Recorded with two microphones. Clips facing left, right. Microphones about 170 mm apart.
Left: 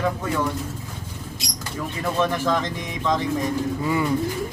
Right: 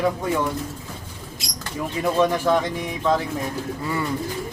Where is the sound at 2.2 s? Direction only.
10° right (ahead or behind).